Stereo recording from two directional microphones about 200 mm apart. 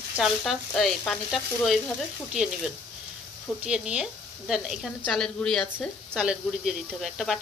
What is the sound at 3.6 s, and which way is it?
Speech, 5° right (ahead or behind).